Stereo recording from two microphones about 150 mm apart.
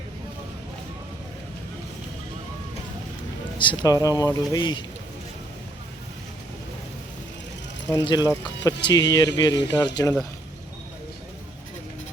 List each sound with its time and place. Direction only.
3.6 s speech: 30° left (ahead or behind)
7.9 s speech: 25° left (ahead or behind)